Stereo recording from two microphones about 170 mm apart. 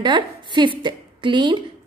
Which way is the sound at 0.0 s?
25° right (ahead or behind).